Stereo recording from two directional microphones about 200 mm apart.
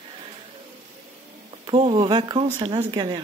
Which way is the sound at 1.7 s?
25° right (ahead or behind).